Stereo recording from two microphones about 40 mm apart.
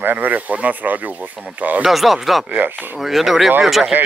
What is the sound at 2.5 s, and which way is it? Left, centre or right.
Speech, right.